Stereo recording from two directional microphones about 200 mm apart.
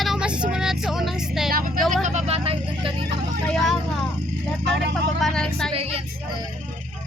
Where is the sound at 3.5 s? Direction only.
Centre (ahead or behind).